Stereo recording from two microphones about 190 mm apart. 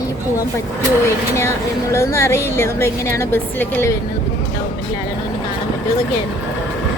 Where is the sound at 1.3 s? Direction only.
15° left (ahead or behind).